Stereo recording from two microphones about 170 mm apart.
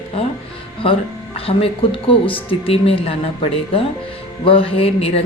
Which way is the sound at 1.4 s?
35° left (ahead or behind).